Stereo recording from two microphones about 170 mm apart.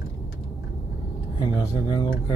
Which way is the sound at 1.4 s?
25° left (ahead or behind).